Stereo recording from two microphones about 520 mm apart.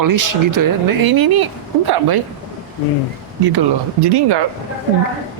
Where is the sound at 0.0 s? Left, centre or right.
Right.